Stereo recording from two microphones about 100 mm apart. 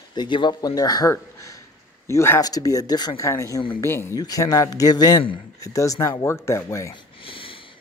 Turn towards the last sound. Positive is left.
turn(degrees=65)  # may be behind; listen again after turning